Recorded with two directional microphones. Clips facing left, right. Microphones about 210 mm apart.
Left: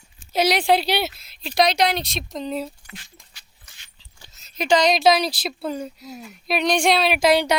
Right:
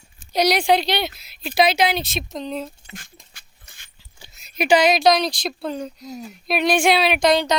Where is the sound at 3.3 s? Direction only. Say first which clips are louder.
Right 2 dB; 50° right (ahead or behind).